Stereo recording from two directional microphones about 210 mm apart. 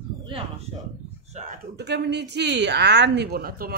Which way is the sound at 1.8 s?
55° right (ahead or behind).